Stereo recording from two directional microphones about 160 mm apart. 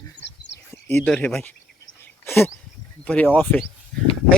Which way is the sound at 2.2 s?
15° left (ahead or behind).